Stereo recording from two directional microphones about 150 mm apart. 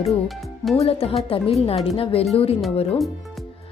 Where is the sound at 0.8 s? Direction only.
40° left (ahead or behind).